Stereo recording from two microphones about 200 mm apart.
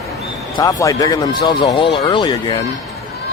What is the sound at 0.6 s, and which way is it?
Speech, 15° left (ahead or behind).